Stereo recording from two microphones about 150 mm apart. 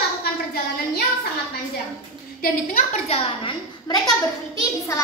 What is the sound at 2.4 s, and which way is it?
Speech, 70° left (ahead or behind).